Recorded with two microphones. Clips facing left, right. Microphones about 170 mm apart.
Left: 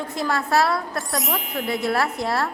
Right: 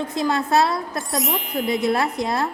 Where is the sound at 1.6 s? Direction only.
20° right (ahead or behind).